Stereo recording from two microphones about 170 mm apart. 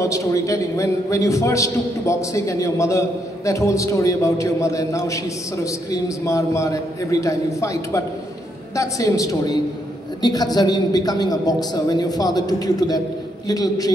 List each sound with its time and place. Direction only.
0.0 s a man's voice: 20° left (ahead or behind)